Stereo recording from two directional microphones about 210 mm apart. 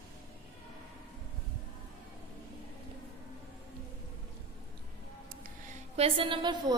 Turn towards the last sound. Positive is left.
turn(degrees=-20)  # may be behind; listen again after turning